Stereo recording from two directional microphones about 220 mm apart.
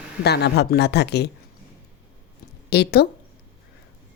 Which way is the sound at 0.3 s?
50° left (ahead or behind).